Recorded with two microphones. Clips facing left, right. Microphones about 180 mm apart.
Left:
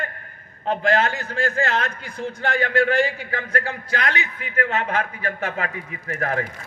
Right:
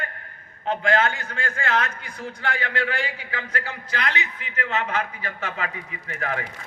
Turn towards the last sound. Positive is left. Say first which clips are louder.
# left 4 dB
turn(degrees=40)  # may be behind; listen again after turning